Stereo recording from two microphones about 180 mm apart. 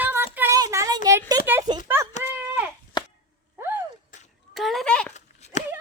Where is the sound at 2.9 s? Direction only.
25° left (ahead or behind).